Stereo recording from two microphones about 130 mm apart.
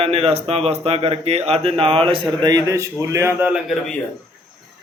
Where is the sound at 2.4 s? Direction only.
30° right (ahead or behind).